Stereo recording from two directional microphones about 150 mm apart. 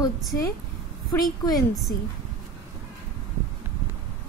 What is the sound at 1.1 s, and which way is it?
Speech, 25° left (ahead or behind).